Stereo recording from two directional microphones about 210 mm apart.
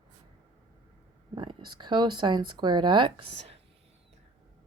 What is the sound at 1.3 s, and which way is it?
Speech, 20° right (ahead or behind).